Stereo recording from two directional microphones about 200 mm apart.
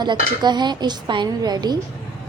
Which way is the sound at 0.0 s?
20° right (ahead or behind).